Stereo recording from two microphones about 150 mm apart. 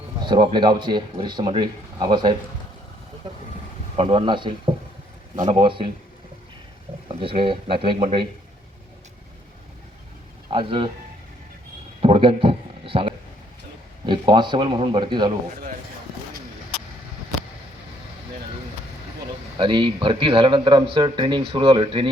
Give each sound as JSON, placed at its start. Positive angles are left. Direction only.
{"t": 0.3, "sound": "speech", "side_deg": -30}
{"t": 3.9, "sound": "speech", "side_deg": -40}
{"t": 7.2, "sound": "speech", "side_deg": -35}
{"t": 10.5, "sound": "speech", "side_deg": -35}
{"t": 12.0, "sound": "a sound", "side_deg": -35}
{"t": 14.1, "sound": "speech", "side_deg": -30}
{"t": 19.5, "sound": "speech", "side_deg": -30}